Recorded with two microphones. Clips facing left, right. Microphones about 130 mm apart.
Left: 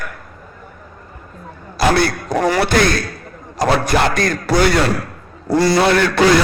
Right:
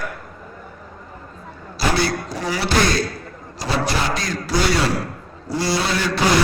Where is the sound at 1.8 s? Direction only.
55° left (ahead or behind).